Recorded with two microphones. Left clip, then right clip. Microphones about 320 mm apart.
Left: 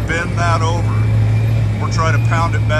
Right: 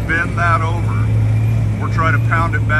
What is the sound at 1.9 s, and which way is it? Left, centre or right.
Speech, centre.